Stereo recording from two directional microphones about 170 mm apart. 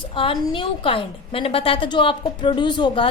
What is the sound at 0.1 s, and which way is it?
A woman's voice, 30° left (ahead or behind).